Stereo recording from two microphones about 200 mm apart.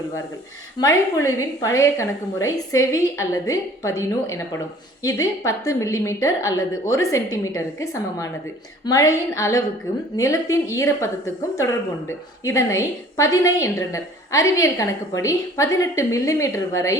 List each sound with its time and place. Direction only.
0.8 s a woman's voice: 20° left (ahead or behind)